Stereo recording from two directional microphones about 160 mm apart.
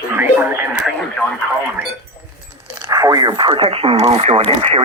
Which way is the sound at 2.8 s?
20° right (ahead or behind).